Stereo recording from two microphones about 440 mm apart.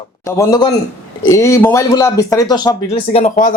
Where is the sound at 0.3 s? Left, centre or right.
Centre.